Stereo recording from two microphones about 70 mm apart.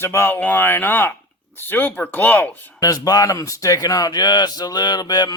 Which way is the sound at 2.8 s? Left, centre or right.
Left.